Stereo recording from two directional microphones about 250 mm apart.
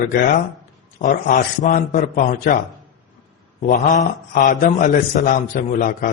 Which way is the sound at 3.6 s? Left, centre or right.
Left.